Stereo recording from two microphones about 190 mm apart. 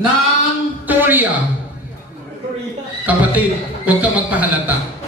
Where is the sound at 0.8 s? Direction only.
10° right (ahead or behind).